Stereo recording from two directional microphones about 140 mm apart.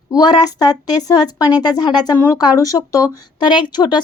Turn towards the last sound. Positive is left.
turn(degrees=30)  # may be behind; listen again after turning